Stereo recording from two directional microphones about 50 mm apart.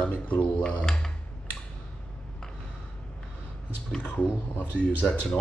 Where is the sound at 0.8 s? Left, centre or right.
Centre.